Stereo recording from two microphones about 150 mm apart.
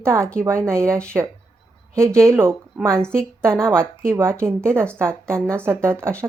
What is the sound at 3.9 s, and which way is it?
A woman's voice, 15° right (ahead or behind).